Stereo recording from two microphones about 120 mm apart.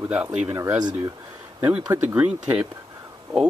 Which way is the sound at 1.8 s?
20° right (ahead or behind).